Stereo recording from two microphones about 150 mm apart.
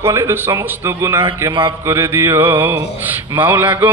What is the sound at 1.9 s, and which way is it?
Mantra, 15° right (ahead or behind).